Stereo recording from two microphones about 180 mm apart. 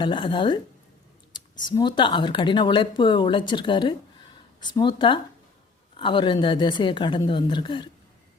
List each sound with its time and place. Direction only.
0.0 s speech: 25° left (ahead or behind)